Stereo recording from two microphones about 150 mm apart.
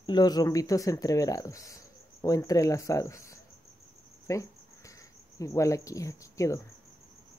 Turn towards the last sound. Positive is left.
turn(degrees=20)  # may be behind; listen again after turning